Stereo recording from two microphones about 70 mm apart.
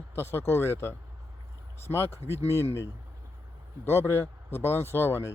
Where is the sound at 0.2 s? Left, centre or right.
Left.